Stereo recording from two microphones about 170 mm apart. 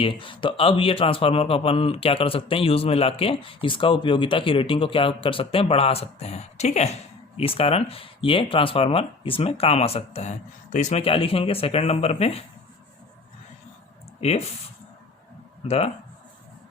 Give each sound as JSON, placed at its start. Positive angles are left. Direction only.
{"t": 0.0, "sound": "speech", "side_deg": 30}
{"t": 14.2, "sound": "speech", "side_deg": 40}
{"t": 15.6, "sound": "speech", "side_deg": 35}